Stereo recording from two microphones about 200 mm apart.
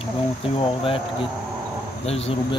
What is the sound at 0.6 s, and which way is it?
Speech, 25° left (ahead or behind).